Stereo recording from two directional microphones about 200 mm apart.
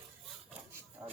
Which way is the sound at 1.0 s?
15° right (ahead or behind).